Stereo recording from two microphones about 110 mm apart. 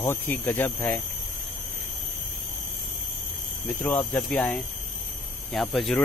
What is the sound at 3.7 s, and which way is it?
Speech, 15° left (ahead or behind).